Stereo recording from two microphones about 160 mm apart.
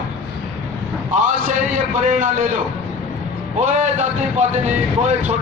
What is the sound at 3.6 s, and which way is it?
A man's voice, 50° right (ahead or behind).